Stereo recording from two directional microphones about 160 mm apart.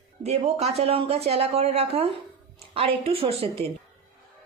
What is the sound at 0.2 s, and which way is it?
Speech, 40° right (ahead or behind).